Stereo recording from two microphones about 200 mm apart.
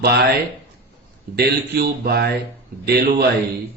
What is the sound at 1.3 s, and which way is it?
A man's voice, 50° right (ahead or behind).